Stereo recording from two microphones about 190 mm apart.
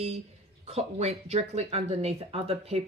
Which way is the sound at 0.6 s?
35° right (ahead or behind).